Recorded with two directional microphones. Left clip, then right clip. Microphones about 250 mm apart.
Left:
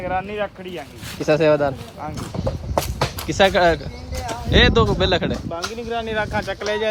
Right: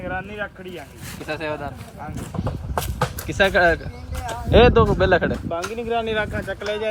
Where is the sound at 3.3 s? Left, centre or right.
Centre.